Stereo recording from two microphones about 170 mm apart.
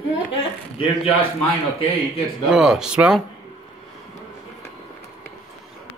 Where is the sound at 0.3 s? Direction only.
30° left (ahead or behind).